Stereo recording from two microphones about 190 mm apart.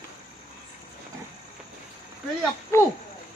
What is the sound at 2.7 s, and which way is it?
Speech, 10° left (ahead or behind).